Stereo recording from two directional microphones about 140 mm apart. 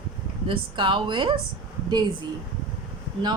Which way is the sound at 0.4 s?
40° right (ahead or behind).